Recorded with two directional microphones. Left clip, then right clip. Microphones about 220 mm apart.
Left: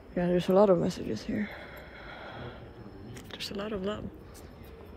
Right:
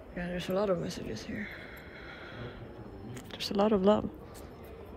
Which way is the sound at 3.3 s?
15° right (ahead or behind).